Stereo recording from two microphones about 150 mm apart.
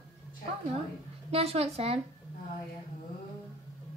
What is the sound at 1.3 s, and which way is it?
Speech, 40° right (ahead or behind).